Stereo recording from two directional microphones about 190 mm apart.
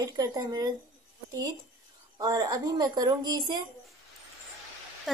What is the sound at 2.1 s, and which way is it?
A woman's voice, 20° right (ahead or behind).